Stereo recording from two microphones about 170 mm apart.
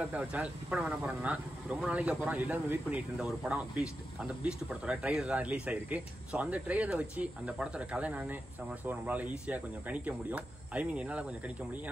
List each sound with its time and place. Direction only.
0.0 s speech: 5° right (ahead or behind)